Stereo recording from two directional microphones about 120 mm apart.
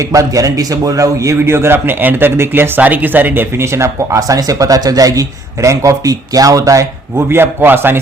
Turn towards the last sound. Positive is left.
turn(degrees=-20)  # may be behind; listen again after turning